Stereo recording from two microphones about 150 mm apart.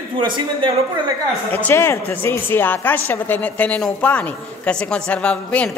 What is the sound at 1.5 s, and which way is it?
A woman's voice, 15° left (ahead or behind).